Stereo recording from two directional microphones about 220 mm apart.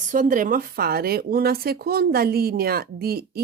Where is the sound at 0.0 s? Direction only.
35° right (ahead or behind).